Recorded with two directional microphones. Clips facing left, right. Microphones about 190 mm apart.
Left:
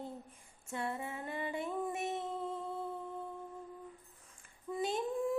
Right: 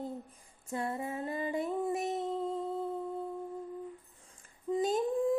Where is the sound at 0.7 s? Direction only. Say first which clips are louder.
Right 4 dB; 40° right (ahead or behind).